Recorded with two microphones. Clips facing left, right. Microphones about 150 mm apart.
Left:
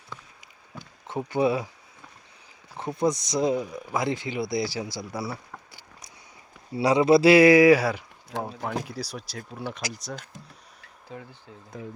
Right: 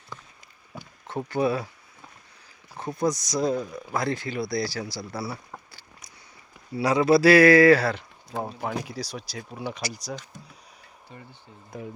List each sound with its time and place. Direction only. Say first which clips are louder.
1.0 s speech: left 1 dB; 15° left (ahead or behind)
2.9 s speech: left 1 dB; 25° left (ahead or behind)
6.7 s speech: left 1 dB; 25° left (ahead or behind)
8.4 s speech: even; centre (ahead or behind)
11.1 s speech: left 6 dB; 90° left